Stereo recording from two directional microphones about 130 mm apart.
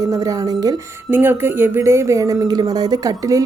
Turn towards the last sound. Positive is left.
turn(degrees=-25)  # may be behind; listen again after turning